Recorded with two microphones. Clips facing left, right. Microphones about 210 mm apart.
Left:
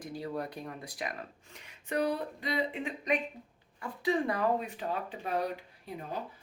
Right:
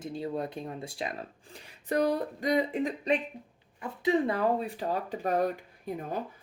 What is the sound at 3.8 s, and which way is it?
Speech, 25° right (ahead or behind).